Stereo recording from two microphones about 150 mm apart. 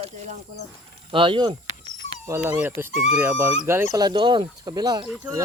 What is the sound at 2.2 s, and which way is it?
Speech, 20° right (ahead or behind).